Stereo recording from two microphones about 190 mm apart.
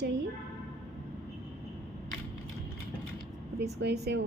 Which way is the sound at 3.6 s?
60° right (ahead or behind).